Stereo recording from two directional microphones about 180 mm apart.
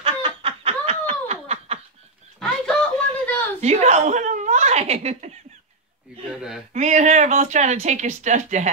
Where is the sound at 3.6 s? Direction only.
40° right (ahead or behind).